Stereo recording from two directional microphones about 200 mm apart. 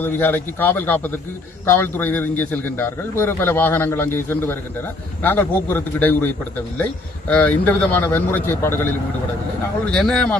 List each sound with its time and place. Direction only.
0.0 s a man's voice: 10° left (ahead or behind)